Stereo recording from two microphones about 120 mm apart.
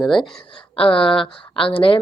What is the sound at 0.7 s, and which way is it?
Speech, 50° left (ahead or behind).